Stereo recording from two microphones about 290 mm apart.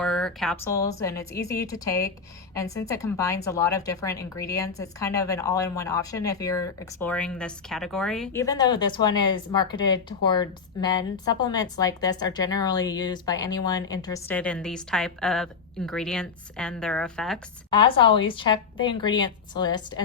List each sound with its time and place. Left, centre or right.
0.0 s speech: centre
17.7 s speech: centre